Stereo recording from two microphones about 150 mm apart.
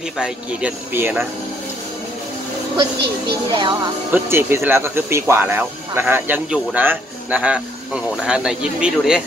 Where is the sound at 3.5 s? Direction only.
35° right (ahead or behind).